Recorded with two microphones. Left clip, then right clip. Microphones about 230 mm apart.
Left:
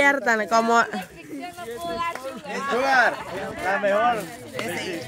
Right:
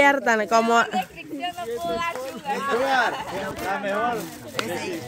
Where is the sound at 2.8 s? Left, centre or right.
Left.